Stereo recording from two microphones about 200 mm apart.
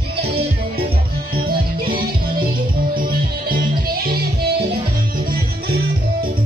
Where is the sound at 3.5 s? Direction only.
50° right (ahead or behind).